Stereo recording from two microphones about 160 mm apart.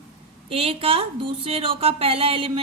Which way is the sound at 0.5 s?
35° right (ahead or behind).